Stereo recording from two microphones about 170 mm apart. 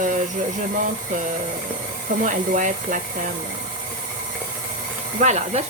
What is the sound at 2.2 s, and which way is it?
Speech, 50° right (ahead or behind).